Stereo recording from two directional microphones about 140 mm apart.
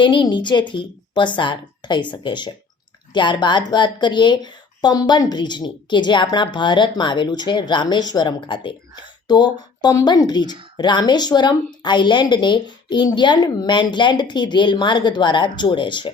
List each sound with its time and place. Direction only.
0.0 s a woman's voice: 35° left (ahead or behind)